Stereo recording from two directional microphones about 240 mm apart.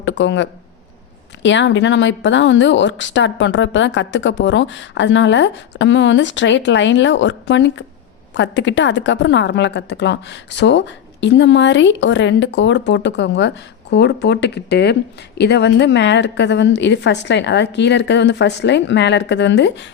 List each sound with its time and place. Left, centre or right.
0.0 s a woman's voice: left